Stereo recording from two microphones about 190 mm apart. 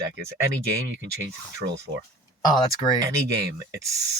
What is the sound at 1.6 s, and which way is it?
Speech, 40° right (ahead or behind).